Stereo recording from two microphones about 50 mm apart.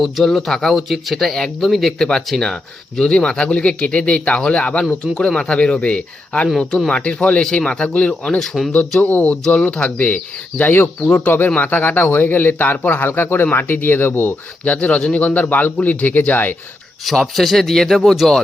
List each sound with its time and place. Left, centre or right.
0.3 s speech: centre
2.0 s speech: centre
8.4 s speech: centre
9.0 s speech: left
10.6 s a man's voice: left
13.1 s speech: left
14.6 s a man's voice: left
17.1 s speech: centre